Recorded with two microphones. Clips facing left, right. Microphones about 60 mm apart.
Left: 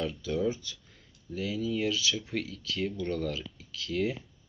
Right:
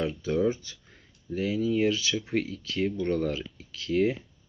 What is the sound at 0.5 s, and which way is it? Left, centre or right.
Speech, right.